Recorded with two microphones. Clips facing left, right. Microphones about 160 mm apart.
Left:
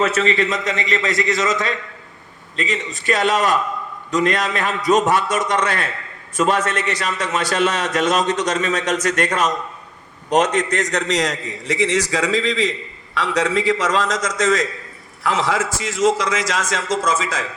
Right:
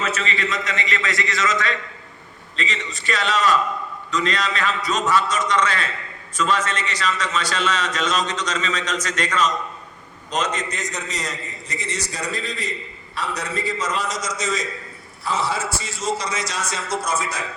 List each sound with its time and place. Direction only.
0.2 s a man's voice: 40° left (ahead or behind)
2.6 s a man's voice: 50° left (ahead or behind); by 17.4 s 90° left